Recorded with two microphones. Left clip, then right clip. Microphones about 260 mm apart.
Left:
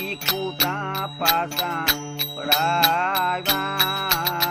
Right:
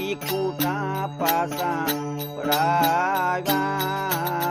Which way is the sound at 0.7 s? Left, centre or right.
Right.